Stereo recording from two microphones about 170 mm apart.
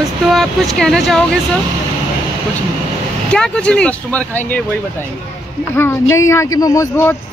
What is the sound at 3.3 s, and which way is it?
Speech, 5° left (ahead or behind).